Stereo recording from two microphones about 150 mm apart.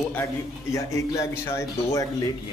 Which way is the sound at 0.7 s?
20° left (ahead or behind).